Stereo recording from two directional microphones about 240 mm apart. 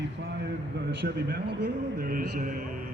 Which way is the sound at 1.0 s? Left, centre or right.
Right.